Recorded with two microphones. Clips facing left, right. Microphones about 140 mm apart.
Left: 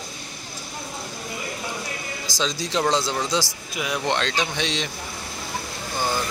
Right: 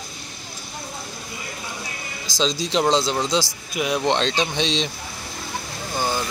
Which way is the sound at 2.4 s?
20° right (ahead or behind).